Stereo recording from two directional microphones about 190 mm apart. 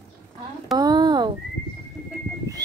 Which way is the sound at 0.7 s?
20° right (ahead or behind).